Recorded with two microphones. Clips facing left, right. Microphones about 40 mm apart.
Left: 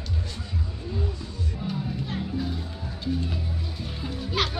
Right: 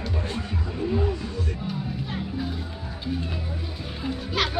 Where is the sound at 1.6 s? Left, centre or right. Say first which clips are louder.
Even; centre.